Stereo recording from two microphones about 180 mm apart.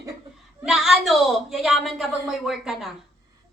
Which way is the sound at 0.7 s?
Centre (ahead or behind).